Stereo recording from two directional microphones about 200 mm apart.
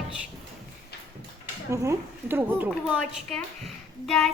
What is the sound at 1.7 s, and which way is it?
A woman's voice, 15° right (ahead or behind).